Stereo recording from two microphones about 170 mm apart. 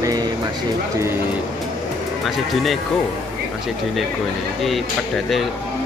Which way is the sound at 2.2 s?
Centre (ahead or behind).